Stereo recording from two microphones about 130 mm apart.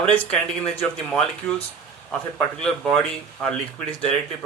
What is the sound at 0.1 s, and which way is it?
Speech, 10° left (ahead or behind).